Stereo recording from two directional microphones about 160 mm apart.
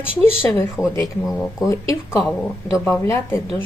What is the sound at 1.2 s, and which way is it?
Speech, centre (ahead or behind).